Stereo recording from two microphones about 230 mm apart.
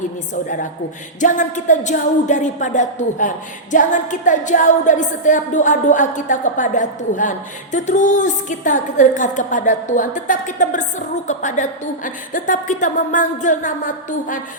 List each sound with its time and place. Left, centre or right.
0.4 s speech: left